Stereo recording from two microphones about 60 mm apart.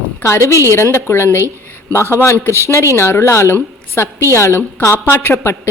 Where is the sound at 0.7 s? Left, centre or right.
Left.